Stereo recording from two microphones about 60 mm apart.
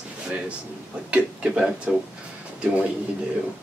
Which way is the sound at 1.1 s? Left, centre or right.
Centre.